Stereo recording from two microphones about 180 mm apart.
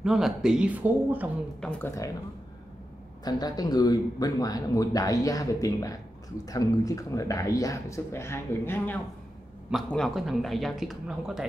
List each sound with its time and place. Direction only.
0.0 s a woman's voice: 5° right (ahead or behind)
1.6 s speech: 10° left (ahead or behind)
3.3 s speech: 20° left (ahead or behind)
9.7 s a woman's voice: centre (ahead or behind)